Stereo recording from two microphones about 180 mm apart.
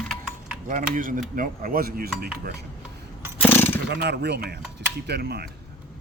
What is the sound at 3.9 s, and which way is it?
Speech, 70° right (ahead or behind).